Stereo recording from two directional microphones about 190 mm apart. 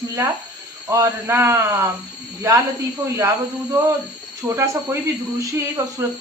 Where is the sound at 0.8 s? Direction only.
15° right (ahead or behind).